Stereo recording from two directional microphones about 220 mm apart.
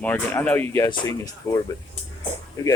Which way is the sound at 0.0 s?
10° left (ahead or behind).